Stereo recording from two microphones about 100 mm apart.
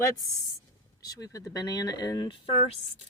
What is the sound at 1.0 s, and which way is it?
Speech, 35° left (ahead or behind).